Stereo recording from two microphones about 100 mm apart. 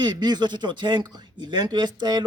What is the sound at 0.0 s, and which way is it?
A man's voice, 45° right (ahead or behind).